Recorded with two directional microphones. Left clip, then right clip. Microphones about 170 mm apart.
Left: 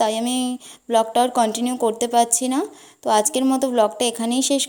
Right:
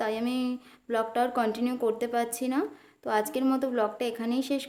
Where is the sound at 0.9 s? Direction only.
30° left (ahead or behind).